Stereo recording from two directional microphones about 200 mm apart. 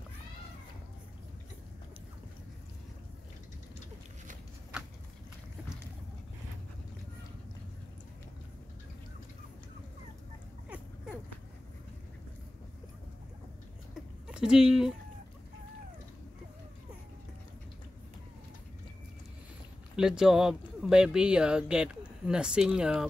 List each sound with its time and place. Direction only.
14.2 s speech: 5° right (ahead or behind)
20.0 s speech: 5° right (ahead or behind)